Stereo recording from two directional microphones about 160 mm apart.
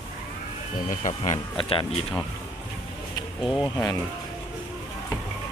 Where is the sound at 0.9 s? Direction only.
50° left (ahead or behind).